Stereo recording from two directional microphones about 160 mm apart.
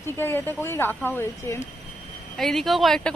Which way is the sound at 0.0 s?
15° left (ahead or behind).